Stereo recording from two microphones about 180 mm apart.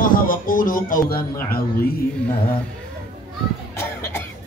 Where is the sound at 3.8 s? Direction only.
15° left (ahead or behind).